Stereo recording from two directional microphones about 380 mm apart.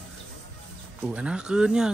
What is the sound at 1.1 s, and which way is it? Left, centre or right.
Speech, centre.